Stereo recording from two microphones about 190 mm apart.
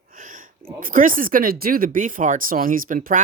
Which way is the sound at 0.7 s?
45° right (ahead or behind).